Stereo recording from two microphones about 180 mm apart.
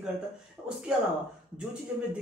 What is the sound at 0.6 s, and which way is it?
Speech, 10° right (ahead or behind).